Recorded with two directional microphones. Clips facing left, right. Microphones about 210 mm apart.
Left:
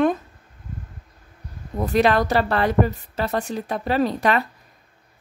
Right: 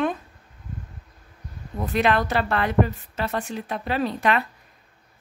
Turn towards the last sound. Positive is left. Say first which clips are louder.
# left 3 dB
turn(degrees=40)  # may be behind; listen again after turning